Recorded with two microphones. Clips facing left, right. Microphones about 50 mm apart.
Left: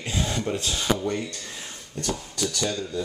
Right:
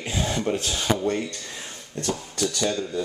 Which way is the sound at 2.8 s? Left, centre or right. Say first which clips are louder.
Right 2 dB; centre.